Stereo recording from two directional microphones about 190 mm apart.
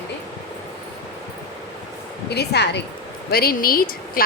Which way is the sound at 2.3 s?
60° left (ahead or behind).